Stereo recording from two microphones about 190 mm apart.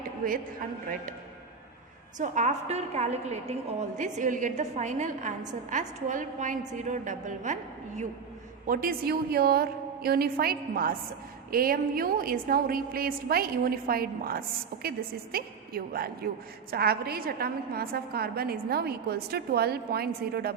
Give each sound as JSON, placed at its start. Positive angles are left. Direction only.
{"t": 2.1, "sound": "a woman's voice", "side_deg": -40}